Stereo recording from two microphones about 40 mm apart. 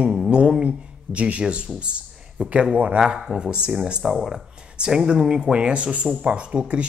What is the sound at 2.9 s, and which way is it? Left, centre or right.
Speech, centre.